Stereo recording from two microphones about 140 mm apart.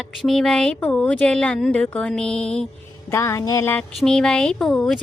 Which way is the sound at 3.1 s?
20° left (ahead or behind).